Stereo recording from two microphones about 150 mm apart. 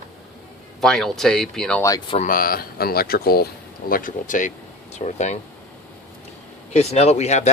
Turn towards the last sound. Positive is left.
turn(degrees=50)  # may be behind; listen again after turning